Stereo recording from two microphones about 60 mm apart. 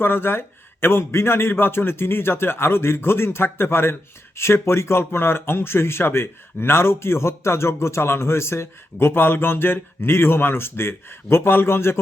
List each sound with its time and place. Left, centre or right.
0.0 s speech: left